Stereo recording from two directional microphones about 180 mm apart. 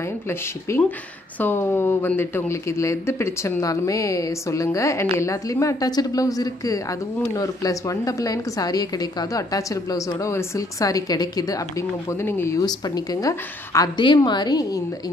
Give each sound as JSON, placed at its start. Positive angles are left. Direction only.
{"t": 0.3, "sound": "speech", "side_deg": 10}